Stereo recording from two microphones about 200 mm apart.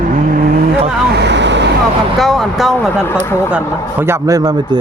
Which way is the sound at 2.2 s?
Centre (ahead or behind).